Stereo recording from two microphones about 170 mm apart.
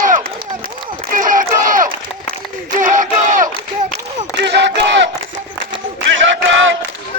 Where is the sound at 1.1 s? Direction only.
50° right (ahead or behind).